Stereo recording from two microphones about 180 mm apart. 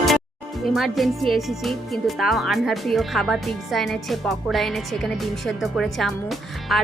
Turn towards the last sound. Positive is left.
turn(degrees=0)  # may be behind; listen again after turning